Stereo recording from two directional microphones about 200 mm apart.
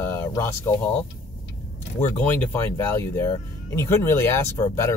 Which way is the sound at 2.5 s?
10° left (ahead or behind).